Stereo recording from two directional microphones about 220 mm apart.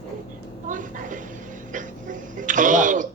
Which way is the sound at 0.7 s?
35° right (ahead or behind).